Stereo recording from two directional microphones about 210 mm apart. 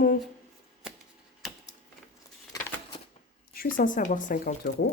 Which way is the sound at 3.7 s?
40° left (ahead or behind).